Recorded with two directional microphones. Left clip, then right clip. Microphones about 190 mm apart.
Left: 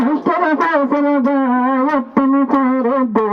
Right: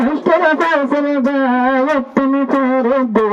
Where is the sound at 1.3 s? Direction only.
35° right (ahead or behind).